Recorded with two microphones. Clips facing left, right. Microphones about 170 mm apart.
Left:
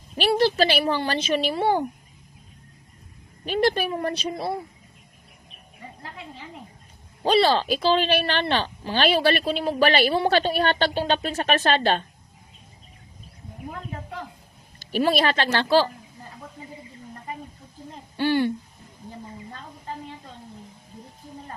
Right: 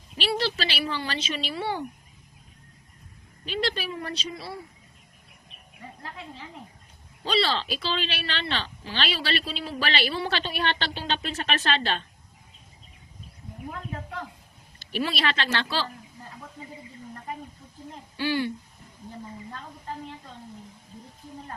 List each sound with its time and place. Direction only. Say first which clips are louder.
0.2 s speech: left 8 dB; 50° left (ahead or behind)
3.4 s speech: left 7 dB; 50° left (ahead or behind)
7.3 s speech: left 7 dB; 45° left (ahead or behind)
14.8 s speech: left 7 dB; 45° left (ahead or behind)
18.2 s speech: left 5 dB; 50° left (ahead or behind)